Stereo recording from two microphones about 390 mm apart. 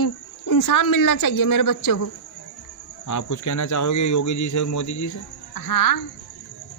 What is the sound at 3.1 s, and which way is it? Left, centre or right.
Speech, left.